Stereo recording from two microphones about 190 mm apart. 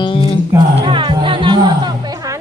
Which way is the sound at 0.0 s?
25° left (ahead or behind).